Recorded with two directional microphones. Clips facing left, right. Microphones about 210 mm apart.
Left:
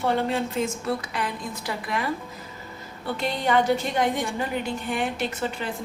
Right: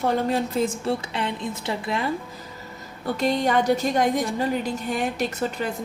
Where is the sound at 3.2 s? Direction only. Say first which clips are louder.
Right 2 dB; 40° right (ahead or behind).